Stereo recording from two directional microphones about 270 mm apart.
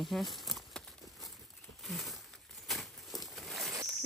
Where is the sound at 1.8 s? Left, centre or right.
Centre.